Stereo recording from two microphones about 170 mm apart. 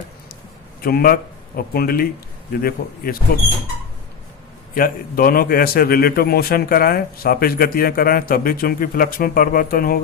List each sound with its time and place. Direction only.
0.8 s a man's voice: 60° left (ahead or behind)
4.7 s a man's voice: 55° left (ahead or behind)